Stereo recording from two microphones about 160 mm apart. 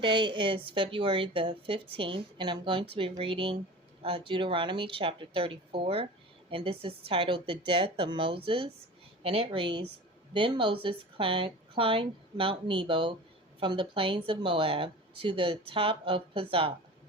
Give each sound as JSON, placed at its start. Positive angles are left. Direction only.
{"t": 0.0, "sound": "speech", "side_deg": -30}